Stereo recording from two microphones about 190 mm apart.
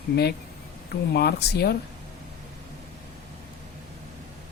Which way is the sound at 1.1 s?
60° left (ahead or behind).